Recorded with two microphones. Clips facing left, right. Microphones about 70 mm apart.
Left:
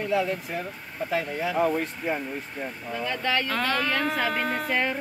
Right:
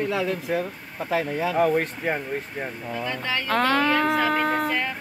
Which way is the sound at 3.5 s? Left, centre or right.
Right.